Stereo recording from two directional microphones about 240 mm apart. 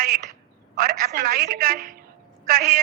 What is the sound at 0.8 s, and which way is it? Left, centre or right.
A man's voice, right.